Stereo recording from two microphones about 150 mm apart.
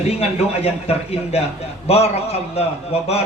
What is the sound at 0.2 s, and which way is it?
A man's voice, 40° left (ahead or behind).